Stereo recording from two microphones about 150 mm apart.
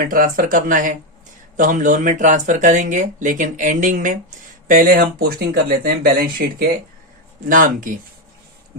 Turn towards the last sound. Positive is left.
turn(degrees=-60)  # may be behind; listen again after turning